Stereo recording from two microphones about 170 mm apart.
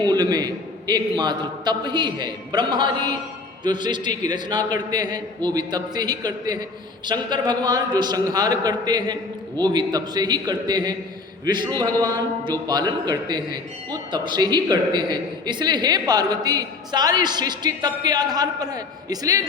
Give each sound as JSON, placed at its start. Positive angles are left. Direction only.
{"t": 0.0, "sound": "a man's voice", "side_deg": -25}